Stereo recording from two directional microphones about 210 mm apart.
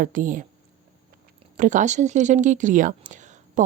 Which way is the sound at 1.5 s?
40° right (ahead or behind).